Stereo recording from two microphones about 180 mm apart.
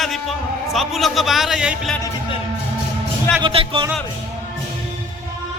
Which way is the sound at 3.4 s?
30° right (ahead or behind).